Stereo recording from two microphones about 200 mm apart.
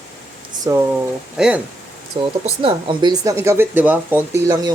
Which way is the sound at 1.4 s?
5° right (ahead or behind).